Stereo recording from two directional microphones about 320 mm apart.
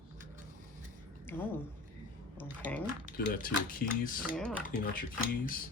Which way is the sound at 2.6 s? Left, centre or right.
Centre.